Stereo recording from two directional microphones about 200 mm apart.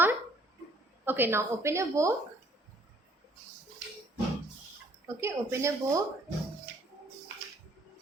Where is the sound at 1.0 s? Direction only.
10° right (ahead or behind).